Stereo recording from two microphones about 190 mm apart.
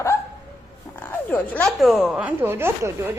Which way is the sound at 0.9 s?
10° left (ahead or behind).